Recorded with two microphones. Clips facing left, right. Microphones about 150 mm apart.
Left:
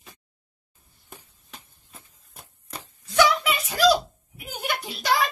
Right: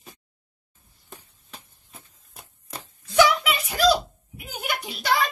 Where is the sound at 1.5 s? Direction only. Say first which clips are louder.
Right 1 dB; 5° right (ahead or behind).